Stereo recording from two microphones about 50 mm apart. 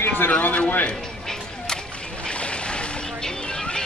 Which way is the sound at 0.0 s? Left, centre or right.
Left.